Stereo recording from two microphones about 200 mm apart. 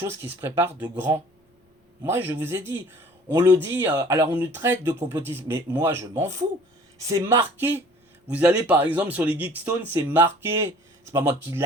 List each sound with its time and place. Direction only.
0.3 s speech: 10° right (ahead or behind)
2.4 s speech: 10° right (ahead or behind)